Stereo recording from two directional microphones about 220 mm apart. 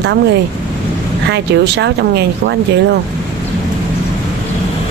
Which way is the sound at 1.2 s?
50° right (ahead or behind).